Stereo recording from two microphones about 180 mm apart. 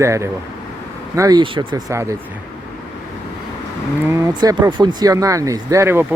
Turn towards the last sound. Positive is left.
turn(degrees=-15)  # may be behind; listen again after turning